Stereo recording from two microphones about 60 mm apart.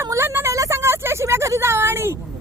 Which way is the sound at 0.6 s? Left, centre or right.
Right.